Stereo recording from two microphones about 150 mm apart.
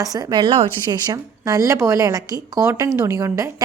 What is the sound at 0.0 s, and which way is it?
Speech, 25° right (ahead or behind).